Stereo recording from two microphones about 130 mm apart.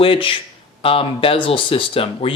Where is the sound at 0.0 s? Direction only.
45° left (ahead or behind).